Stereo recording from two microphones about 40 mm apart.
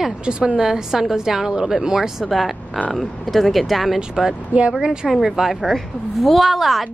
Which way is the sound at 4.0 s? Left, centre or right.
Centre.